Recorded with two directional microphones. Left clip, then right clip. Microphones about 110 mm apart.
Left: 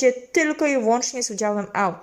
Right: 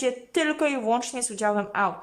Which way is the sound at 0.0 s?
Centre (ahead or behind).